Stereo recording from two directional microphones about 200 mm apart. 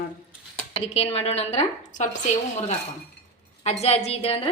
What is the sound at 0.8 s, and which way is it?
A woman's voice, 30° left (ahead or behind).